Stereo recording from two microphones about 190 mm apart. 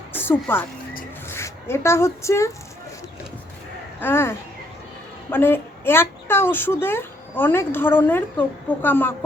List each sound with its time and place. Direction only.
0.1 s speech: 10° left (ahead or behind)
4.0 s a woman's voice: 10° left (ahead or behind)